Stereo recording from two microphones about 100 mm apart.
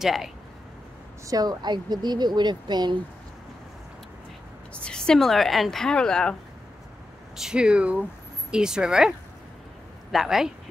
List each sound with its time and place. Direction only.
0.0 s a woman's voice: 5° right (ahead or behind)
1.2 s speech: 40° right (ahead or behind)
4.7 s a woman's voice: 10° left (ahead or behind)
7.3 s speech: 5° right (ahead or behind)
10.1 s a woman's voice: 5° right (ahead or behind)